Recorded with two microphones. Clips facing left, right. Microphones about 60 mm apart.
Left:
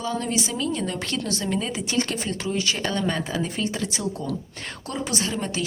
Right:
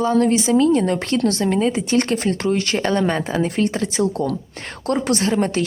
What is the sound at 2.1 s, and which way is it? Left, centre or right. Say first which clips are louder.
Speech: right 8 dB; right.